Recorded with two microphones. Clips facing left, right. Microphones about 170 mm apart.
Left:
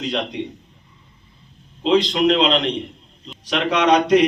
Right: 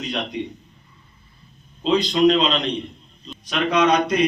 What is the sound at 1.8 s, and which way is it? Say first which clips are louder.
A man's voice: even; 80° left.